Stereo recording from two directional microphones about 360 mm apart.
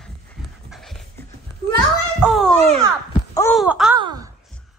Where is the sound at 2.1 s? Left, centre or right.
Centre.